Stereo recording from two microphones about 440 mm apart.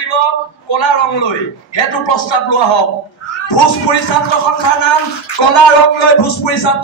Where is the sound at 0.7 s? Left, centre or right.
Left.